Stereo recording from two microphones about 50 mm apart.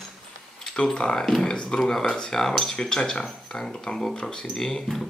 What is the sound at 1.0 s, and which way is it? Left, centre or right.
Speech, centre.